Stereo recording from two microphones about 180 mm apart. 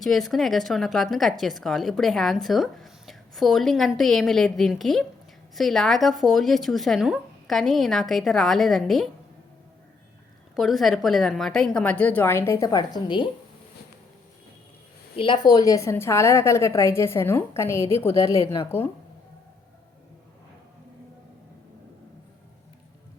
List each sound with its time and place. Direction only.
0.0 s speech: centre (ahead or behind)
10.5 s a woman's voice: centre (ahead or behind); by 13.3 s 25° left (ahead or behind)
15.1 s a woman's voice: 30° left (ahead or behind)